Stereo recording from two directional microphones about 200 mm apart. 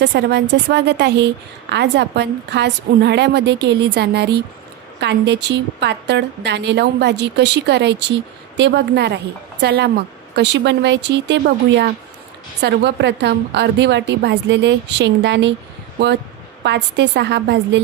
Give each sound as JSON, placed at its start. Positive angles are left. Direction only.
{"t": 0.0, "sound": "a woman's voice", "side_deg": -60}
{"t": 16.6, "sound": "a woman's voice", "side_deg": -60}